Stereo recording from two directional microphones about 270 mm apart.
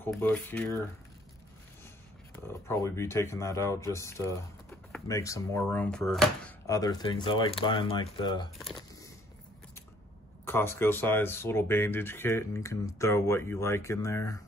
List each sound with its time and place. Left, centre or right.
0.0 s speech: centre
2.4 s speech: centre
6.7 s speech: centre
8.6 s a sound: centre
10.4 s speech: centre